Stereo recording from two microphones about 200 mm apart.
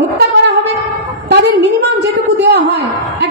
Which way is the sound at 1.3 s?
60° right (ahead or behind).